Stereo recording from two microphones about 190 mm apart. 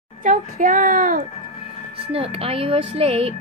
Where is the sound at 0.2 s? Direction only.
45° right (ahead or behind).